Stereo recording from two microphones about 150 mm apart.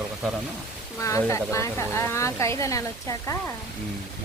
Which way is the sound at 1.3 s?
20° left (ahead or behind).